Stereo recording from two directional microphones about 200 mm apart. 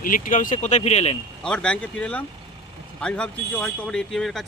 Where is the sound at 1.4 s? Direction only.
5° left (ahead or behind).